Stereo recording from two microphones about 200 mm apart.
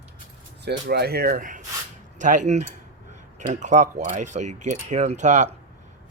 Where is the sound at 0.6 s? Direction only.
55° right (ahead or behind); by 5.5 s 35° right (ahead or behind).